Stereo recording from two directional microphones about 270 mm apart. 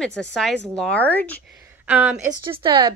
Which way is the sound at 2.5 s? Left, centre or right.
Centre.